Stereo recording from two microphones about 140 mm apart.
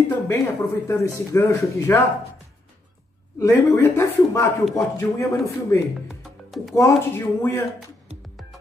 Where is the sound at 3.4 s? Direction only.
15° left (ahead or behind).